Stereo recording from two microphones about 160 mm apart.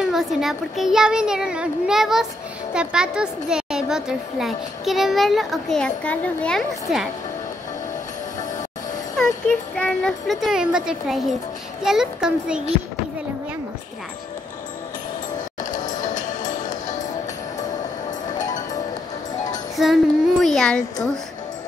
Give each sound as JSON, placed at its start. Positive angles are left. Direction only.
{"t": 0.0, "sound": "a woman's voice", "side_deg": 0}
{"t": 9.8, "sound": "a woman's voice", "side_deg": 5}
{"t": 19.8, "sound": "child singing", "side_deg": 0}